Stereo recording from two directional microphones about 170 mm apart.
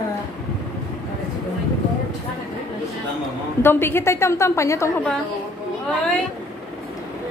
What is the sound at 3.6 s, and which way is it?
A woman's voice, 15° left (ahead or behind).